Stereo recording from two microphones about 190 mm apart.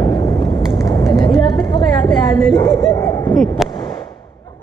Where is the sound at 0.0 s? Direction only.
25° left (ahead or behind).